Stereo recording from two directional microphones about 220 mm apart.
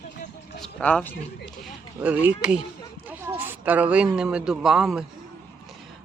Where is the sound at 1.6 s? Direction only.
5° right (ahead or behind).